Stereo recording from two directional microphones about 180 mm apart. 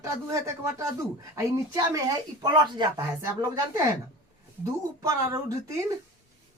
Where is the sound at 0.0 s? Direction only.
15° right (ahead or behind).